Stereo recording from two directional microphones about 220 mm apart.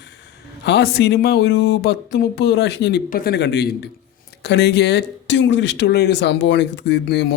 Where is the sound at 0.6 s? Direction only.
50° left (ahead or behind).